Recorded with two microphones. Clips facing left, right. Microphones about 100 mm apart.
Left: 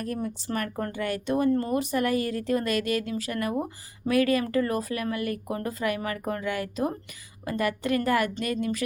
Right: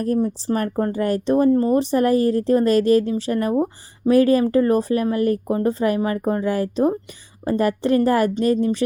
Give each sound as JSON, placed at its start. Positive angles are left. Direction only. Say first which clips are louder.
{"t": 0.0, "sound": "speech", "louder": "right 11 dB", "side_deg": -35}